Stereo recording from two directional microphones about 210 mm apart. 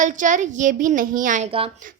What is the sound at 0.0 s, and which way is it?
A woman's voice, 35° right (ahead or behind).